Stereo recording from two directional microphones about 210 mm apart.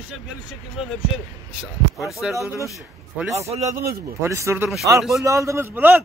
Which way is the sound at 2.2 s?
Centre (ahead or behind).